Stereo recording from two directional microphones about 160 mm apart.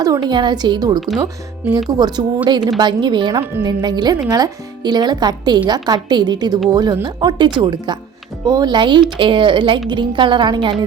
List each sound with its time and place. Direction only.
0.0 s a woman's voice: 25° right (ahead or behind)